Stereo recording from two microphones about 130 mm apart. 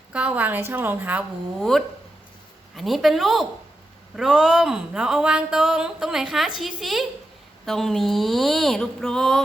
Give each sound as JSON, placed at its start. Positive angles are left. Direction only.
{"t": 0.1, "sound": "a woman's voice", "side_deg": -10}
{"t": 1.5, "sound": "speech", "side_deg": 0}